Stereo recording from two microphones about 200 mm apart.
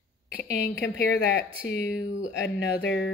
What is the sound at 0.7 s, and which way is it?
Speech, 65° left (ahead or behind).